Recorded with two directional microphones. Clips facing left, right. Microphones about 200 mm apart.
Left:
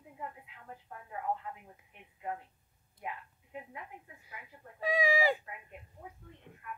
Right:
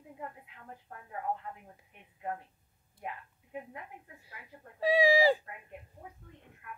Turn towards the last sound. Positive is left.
turn(degrees=-35)  # may be behind; listen again after turning